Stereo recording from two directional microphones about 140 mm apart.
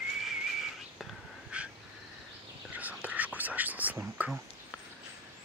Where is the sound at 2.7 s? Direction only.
10° right (ahead or behind).